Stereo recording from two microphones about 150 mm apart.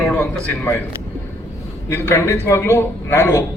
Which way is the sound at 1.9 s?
15° left (ahead or behind).